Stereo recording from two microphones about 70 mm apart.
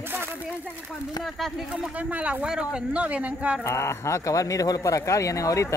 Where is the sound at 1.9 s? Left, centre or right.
Centre.